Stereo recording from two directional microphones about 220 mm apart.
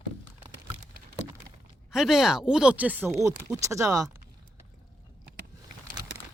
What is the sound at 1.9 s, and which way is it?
Speech, centre (ahead or behind).